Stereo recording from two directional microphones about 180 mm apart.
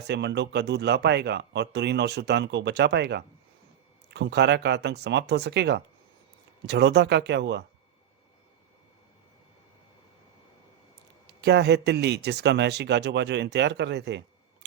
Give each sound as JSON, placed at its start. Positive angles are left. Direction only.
{"t": 0.1, "sound": "speech", "side_deg": -75}
{"t": 11.3, "sound": "speech", "side_deg": -70}